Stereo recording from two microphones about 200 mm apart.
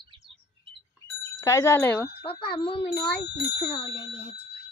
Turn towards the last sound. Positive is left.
turn(degrees=25)  # may be behind; listen again after turning